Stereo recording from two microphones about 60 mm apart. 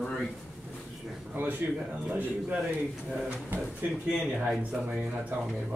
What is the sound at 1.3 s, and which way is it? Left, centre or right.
Speech, right.